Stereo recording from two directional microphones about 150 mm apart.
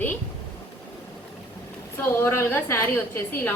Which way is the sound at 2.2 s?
15° left (ahead or behind).